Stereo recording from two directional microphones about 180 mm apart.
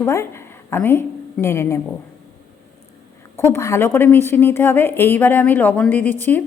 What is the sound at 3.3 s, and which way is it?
A woman's voice, 15° left (ahead or behind).